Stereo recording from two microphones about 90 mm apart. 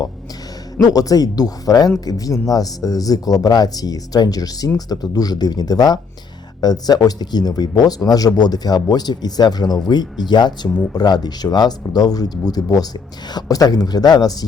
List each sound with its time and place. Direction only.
0.8 s speech: 40° left (ahead or behind)